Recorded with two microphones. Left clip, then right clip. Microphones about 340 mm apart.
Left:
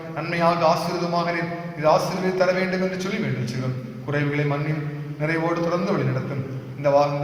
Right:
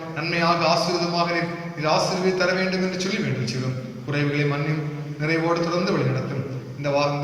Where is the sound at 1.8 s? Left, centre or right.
Left.